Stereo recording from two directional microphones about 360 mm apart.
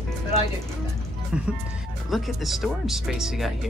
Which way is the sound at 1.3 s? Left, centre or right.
Centre.